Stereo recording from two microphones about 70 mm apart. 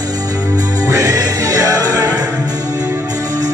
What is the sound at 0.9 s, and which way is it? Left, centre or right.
Music, right.